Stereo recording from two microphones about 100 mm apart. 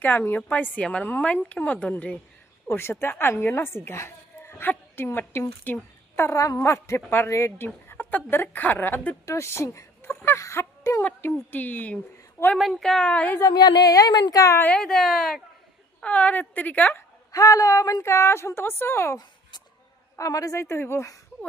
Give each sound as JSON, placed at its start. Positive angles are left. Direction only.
{"t": 0.0, "sound": "a woman's voice", "side_deg": 20}
{"t": 3.8, "sound": "a sound", "side_deg": 25}
{"t": 4.7, "sound": "speech", "side_deg": 20}
{"t": 10.2, "sound": "a sound", "side_deg": 30}
{"t": 11.0, "sound": "a woman's voice", "side_deg": 20}
{"t": 12.4, "sound": "speech", "side_deg": 35}
{"t": 12.7, "sound": "a woman's voice", "side_deg": 5}
{"t": 13.4, "sound": "speech", "side_deg": 45}
{"t": 14.8, "sound": "a woman's voice", "side_deg": 5}
{"t": 16.0, "sound": "a woman's voice", "side_deg": 15}
{"t": 17.3, "sound": "speech", "side_deg": 35}